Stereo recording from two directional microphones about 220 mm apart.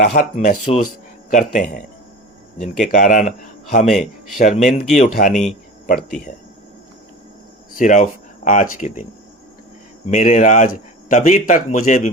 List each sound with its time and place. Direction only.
0.0 s speech: 35° left (ahead or behind)
5.3 s speech: centre (ahead or behind)
7.8 s speech: 35° left (ahead or behind)
10.1 s speech: 35° left (ahead or behind)